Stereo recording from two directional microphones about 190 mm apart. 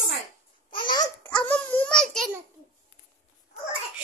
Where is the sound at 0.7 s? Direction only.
25° left (ahead or behind).